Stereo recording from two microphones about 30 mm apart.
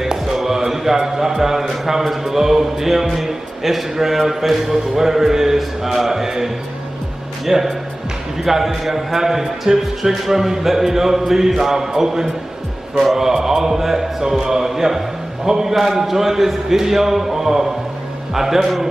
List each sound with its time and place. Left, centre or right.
1.0 s mantra: centre
14.7 s a man's voice: centre
15.7 s mantra: centre